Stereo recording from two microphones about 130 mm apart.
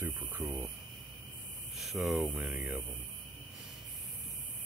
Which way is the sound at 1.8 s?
Centre (ahead or behind).